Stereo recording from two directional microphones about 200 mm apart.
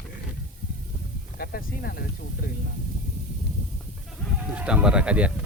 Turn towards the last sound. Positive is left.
turn(degrees=-5)  # may be behind; listen again after turning